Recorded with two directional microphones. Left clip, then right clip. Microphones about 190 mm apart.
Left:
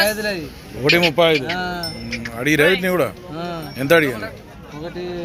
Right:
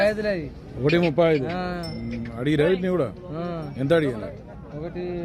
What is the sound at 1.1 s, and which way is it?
Speech, 20° right (ahead or behind).